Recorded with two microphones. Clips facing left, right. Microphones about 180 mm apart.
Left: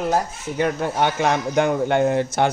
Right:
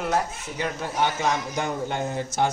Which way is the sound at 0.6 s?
60° left (ahead or behind).